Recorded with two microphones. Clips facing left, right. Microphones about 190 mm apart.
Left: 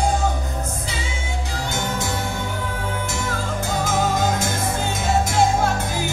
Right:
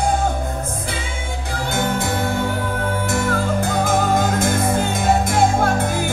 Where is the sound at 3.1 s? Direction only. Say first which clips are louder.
Right 6 dB; 55° right (ahead or behind).